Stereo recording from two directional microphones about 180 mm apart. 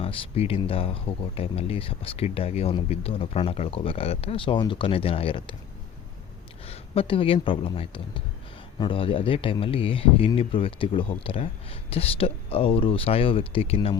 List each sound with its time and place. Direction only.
0.0 s speech: 30° left (ahead or behind)
6.7 s speech: 30° left (ahead or behind)